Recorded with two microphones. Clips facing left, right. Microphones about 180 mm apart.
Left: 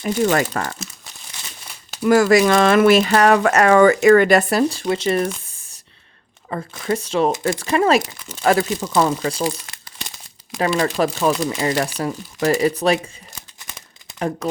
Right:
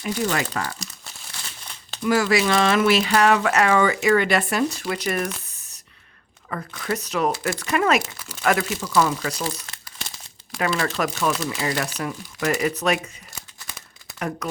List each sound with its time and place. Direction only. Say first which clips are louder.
0.0 s speech: left 6 dB; 45° left (ahead or behind)
1.3 s crumpling: left 1 dB; 10° left (ahead or behind)
2.0 s speech: left 6 dB; 45° left (ahead or behind); by 9.4 s 30° left (ahead or behind)
10.7 s speech: left 5 dB; 20° left (ahead or behind)
10.9 s speech: left 5 dB; 30° left (ahead or behind)
13.6 s crumpling: left 1 dB; 20° left (ahead or behind)
14.2 s speech: left 5 dB; 30° left (ahead or behind)